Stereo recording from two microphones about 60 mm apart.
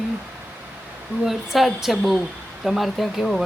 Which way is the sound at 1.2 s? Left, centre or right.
Centre.